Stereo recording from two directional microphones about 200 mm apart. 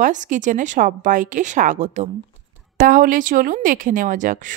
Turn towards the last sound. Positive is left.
turn(degrees=-40)  # may be behind; listen again after turning